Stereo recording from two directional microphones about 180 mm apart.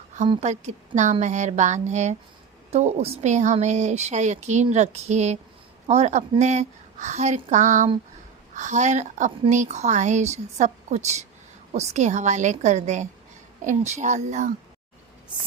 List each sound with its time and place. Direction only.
0.3 s a woman's voice: 35° right (ahead or behind)